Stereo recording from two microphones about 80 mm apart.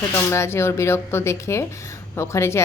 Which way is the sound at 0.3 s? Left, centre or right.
Left.